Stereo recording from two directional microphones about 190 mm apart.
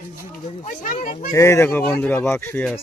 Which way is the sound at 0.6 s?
40° left (ahead or behind).